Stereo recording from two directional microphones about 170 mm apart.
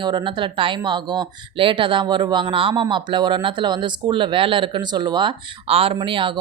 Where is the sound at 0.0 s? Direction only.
25° right (ahead or behind).